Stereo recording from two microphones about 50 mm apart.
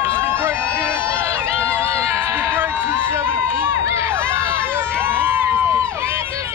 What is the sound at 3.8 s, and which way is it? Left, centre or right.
Crowd, right.